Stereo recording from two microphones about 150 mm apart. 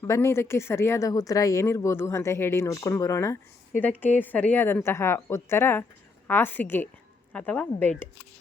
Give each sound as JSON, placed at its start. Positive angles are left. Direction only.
{"t": 0.0, "sound": "speech", "side_deg": 20}